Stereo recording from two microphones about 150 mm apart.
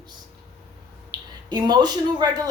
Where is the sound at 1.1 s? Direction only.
30° right (ahead or behind).